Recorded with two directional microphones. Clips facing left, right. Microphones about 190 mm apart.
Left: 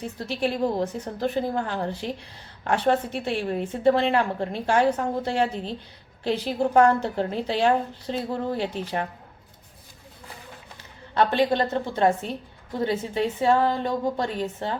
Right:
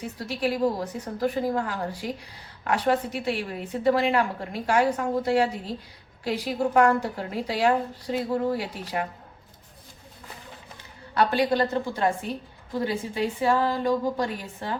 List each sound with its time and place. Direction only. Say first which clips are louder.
0.2 s a woman's voice: even; 25° left (ahead or behind)
11.1 s a woman's voice: left 1 dB; 25° left (ahead or behind)